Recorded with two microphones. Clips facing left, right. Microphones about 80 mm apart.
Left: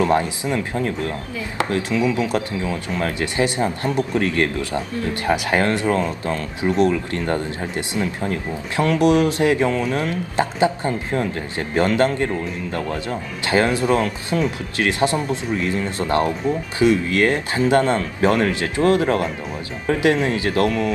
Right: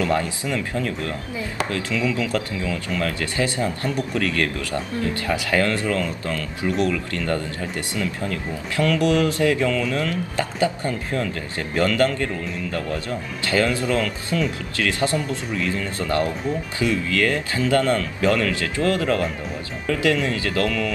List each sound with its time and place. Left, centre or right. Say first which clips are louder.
0.0 s speech: left 4 dB; left